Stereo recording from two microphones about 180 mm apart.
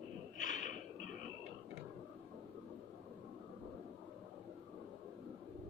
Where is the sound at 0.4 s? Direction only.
45° left (ahead or behind).